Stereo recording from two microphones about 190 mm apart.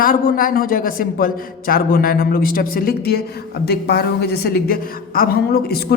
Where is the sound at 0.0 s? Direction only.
50° left (ahead or behind).